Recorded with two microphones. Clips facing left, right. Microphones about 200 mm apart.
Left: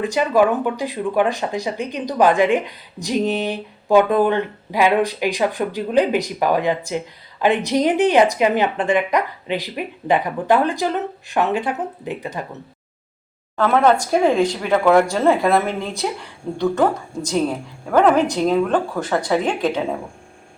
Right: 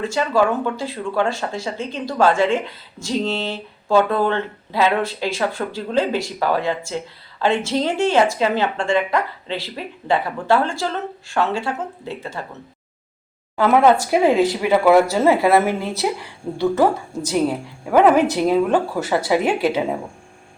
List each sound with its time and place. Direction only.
0.0 s speech: 15° left (ahead or behind)
13.6 s speech: 10° right (ahead or behind)